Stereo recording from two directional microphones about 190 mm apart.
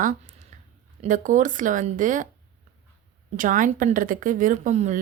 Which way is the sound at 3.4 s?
45° right (ahead or behind).